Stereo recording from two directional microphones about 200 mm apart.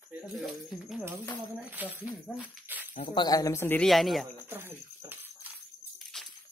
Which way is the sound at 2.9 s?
25° left (ahead or behind).